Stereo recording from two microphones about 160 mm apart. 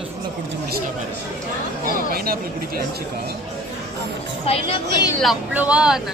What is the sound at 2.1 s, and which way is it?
Speech, 70° right (ahead or behind).